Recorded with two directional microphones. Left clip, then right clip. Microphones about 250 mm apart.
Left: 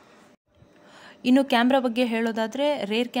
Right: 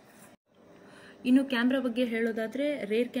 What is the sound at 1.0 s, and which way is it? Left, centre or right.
A woman's voice, left.